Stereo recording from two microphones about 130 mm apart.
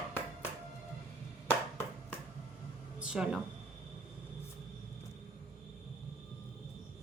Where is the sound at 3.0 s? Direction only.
5° right (ahead or behind).